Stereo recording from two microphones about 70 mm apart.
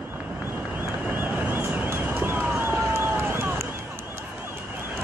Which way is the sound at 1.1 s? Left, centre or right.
Right.